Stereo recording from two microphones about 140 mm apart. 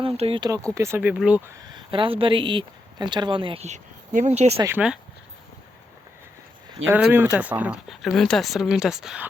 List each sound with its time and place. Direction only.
0.0 s speech: 45° right (ahead or behind)
0.4 s speech: 25° right (ahead or behind); by 1.5 s 10° right (ahead or behind)
1.7 s speech: 35° right (ahead or behind)
3.7 s speech: 60° right (ahead or behind)
4.5 s speech: 20° right (ahead or behind)
6.9 s speech: 15° right (ahead or behind)